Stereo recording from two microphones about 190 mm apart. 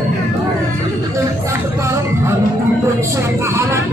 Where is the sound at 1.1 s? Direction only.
15° right (ahead or behind).